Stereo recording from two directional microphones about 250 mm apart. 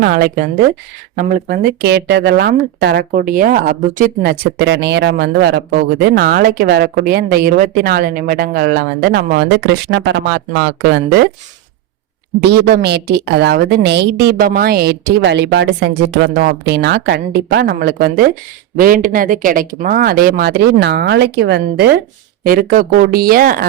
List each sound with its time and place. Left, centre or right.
0.0 s speech: right
12.4 s speech: right